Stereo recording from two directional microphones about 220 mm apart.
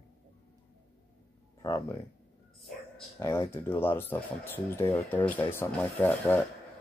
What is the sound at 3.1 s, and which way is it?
Speech, 10° left (ahead or behind).